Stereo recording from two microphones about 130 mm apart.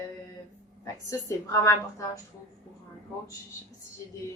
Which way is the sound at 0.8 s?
25° left (ahead or behind).